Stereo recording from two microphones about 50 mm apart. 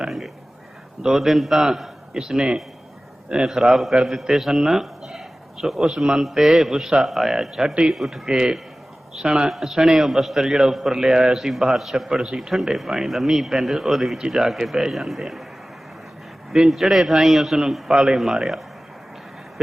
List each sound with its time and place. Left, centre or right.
1.0 s a man's voice: centre
8.3 s a man's voice: centre
9.5 s a man's voice: centre
16.5 s a man's voice: centre